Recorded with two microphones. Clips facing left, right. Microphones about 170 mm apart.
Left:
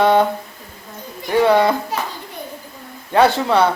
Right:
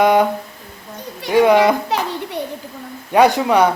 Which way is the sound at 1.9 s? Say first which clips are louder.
Right 4 dB; 75° right (ahead or behind).